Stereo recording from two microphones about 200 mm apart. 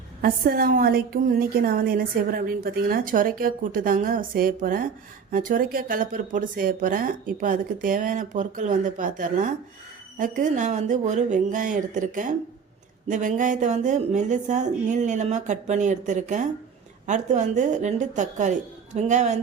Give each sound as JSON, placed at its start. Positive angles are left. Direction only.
{"t": 0.2, "sound": "a woman's voice", "side_deg": -50}